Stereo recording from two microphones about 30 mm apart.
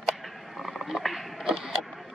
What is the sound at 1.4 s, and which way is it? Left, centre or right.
Vehicle, right.